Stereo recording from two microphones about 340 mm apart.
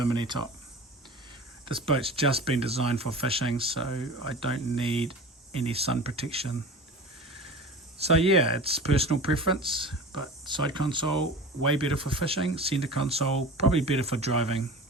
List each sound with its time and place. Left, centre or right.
0.2 s speech: centre
1.6 s speech: centre
7.9 s speech: centre